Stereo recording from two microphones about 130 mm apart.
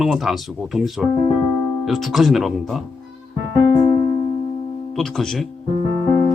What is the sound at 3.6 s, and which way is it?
Music, 35° left (ahead or behind).